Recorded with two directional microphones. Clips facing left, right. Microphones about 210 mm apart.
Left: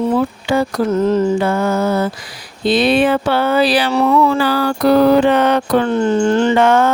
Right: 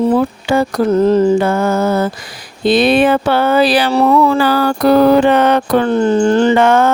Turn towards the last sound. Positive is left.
turn(degrees=-50)  # may be behind; listen again after turning